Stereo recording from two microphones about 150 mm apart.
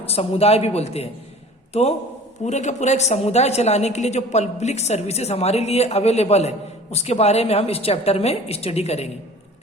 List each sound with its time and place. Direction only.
0.0 s a woman's voice: 40° left (ahead or behind)
2.4 s a woman's voice: 50° left (ahead or behind)